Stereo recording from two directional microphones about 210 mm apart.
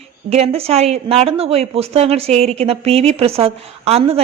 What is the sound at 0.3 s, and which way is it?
A woman's voice, 30° right (ahead or behind).